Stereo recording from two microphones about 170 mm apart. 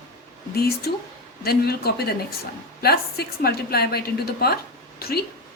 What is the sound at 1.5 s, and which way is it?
A woman's voice, 65° left (ahead or behind).